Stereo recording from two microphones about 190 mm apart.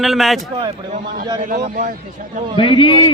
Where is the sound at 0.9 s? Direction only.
45° right (ahead or behind).